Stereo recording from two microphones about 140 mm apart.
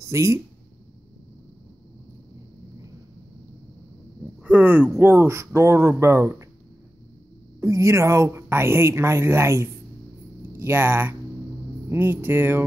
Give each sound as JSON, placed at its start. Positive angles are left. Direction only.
{"t": 0.0, "sound": "speech", "side_deg": -20}
{"t": 4.4, "sound": "speech", "side_deg": -10}
{"t": 7.6, "sound": "speech", "side_deg": -20}